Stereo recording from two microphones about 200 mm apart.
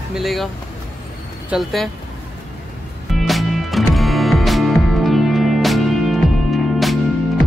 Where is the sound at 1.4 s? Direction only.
Centre (ahead or behind).